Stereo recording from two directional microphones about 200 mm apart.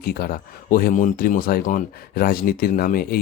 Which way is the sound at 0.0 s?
50° left (ahead or behind).